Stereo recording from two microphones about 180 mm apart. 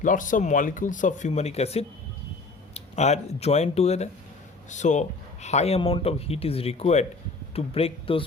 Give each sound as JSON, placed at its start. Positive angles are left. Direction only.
{"t": 0.0, "sound": "speech", "side_deg": 45}